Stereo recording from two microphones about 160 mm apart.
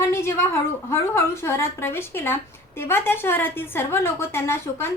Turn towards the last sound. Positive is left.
turn(degrees=15)  # may be behind; listen again after turning